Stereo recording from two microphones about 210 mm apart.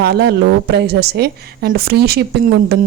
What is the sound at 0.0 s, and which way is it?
Speech, 50° right (ahead or behind).